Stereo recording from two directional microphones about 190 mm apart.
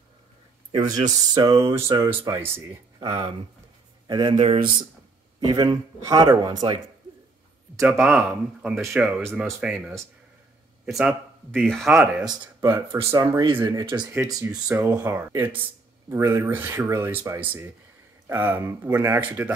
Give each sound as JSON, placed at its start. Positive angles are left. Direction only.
{"t": 0.7, "sound": "speech", "side_deg": -20}
{"t": 7.8, "sound": "speech", "side_deg": -5}
{"t": 12.3, "sound": "speech", "side_deg": -10}
{"t": 14.1, "sound": "speech", "side_deg": -10}